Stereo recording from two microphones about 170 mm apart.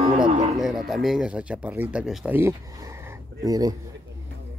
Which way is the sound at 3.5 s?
20° right (ahead or behind).